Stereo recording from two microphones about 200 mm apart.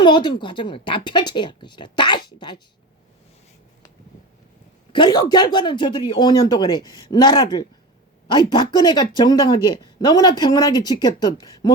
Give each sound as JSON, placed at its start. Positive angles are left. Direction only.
{"t": 0.0, "sound": "speech", "side_deg": 20}
{"t": 4.9, "sound": "speech", "side_deg": 20}